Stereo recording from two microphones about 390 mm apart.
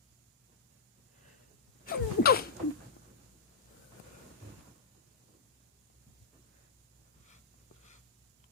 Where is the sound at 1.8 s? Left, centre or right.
Left.